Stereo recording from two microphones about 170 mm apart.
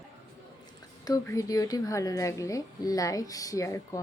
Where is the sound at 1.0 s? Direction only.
20° left (ahead or behind).